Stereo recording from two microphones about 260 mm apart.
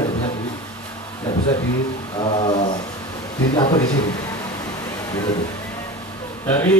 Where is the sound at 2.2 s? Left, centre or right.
Centre.